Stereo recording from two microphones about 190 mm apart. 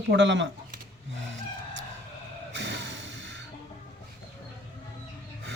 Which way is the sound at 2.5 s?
70° right (ahead or behind).